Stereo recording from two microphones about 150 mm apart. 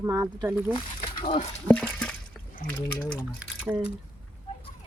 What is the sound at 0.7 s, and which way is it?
Speech, 35° left (ahead or behind).